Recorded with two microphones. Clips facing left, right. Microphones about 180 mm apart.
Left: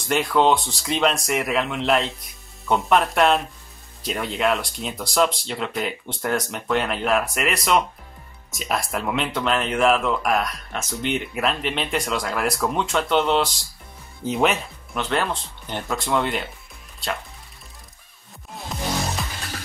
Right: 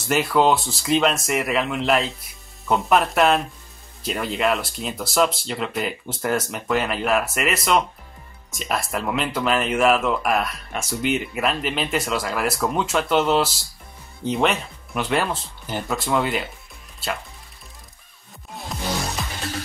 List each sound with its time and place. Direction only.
0.1 s speech: 5° right (ahead or behind)
18.5 s music: centre (ahead or behind)